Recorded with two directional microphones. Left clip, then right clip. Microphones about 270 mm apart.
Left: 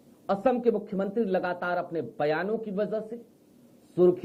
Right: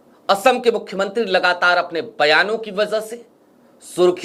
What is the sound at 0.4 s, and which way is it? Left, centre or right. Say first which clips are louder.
A man's voice: right 8 dB; centre.